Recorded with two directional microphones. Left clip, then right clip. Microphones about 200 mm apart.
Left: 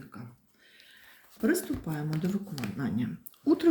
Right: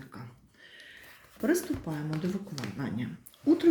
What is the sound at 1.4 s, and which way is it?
Speech, 5° left (ahead or behind).